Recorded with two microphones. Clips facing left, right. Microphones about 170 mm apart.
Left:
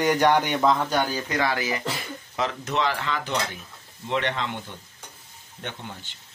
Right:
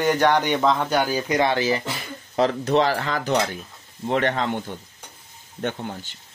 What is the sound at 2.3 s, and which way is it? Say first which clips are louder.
Cutlery: right 8 dB; 35° right (ahead or behind).